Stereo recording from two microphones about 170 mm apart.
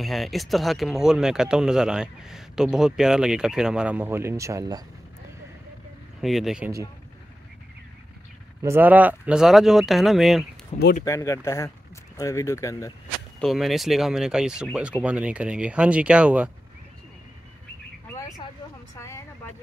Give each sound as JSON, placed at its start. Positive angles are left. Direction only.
{"t": 0.0, "sound": "speech", "side_deg": 0}
{"t": 6.2, "sound": "speech", "side_deg": 0}
{"t": 8.6, "sound": "speech", "side_deg": -10}
{"t": 10.7, "sound": "speech", "side_deg": 40}
{"t": 11.1, "sound": "speech", "side_deg": 20}
{"t": 13.4, "sound": "speech", "side_deg": 0}
{"t": 18.9, "sound": "vehicle", "side_deg": 15}